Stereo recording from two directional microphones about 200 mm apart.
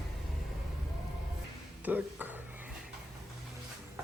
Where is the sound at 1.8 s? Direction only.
10° right (ahead or behind).